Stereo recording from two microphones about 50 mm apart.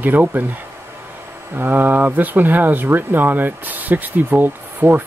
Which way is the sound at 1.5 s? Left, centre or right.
Right.